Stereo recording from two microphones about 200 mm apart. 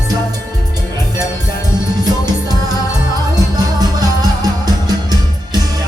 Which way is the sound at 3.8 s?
20° right (ahead or behind).